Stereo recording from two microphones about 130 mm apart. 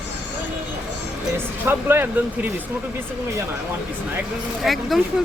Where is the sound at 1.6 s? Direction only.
15° right (ahead or behind).